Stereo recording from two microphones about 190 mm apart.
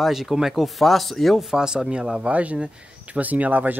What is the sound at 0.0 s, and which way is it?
Speech, centre (ahead or behind).